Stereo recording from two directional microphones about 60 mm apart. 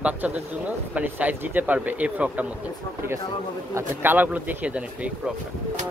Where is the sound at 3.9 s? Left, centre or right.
Right.